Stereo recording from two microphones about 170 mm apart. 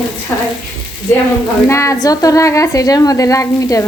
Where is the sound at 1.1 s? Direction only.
15° left (ahead or behind).